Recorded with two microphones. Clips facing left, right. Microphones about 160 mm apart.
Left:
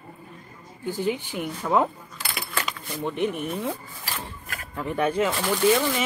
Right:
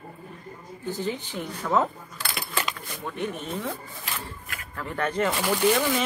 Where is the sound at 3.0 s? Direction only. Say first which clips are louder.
Left 5 dB; 15° left (ahead or behind).